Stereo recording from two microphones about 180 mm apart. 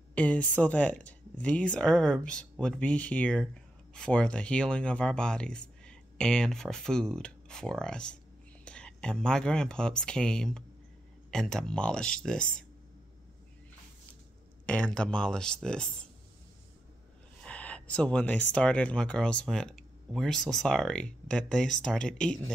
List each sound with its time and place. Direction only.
0.1 s speech: 5° left (ahead or behind)
14.7 s speech: 5° left (ahead or behind)
17.4 s speech: 5° left (ahead or behind)